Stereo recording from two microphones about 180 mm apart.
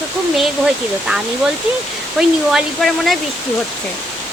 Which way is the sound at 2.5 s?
Centre (ahead or behind).